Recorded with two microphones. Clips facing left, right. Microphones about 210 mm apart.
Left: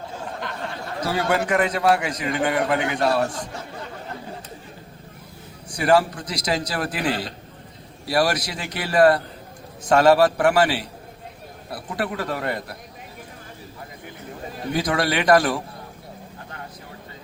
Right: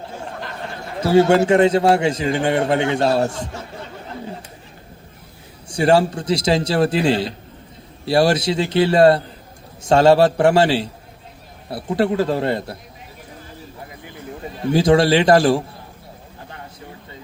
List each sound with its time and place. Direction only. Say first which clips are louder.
1.0 s a man's voice: right 10 dB; 25° right (ahead or behind)
5.6 s a man's voice: right 3 dB; 25° right (ahead or behind)
14.7 s a man's voice: right 9 dB; 25° right (ahead or behind)